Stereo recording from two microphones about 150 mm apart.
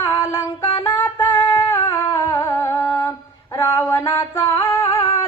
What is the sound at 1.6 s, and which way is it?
Humming, 15° left (ahead or behind).